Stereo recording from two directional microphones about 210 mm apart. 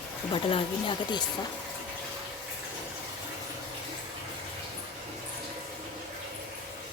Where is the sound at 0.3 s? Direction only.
25° left (ahead or behind).